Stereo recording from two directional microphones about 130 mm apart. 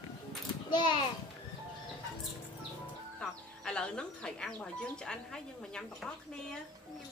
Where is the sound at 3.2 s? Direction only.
5° left (ahead or behind).